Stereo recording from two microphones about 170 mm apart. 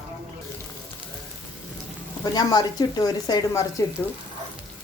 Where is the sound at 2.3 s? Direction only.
25° left (ahead or behind).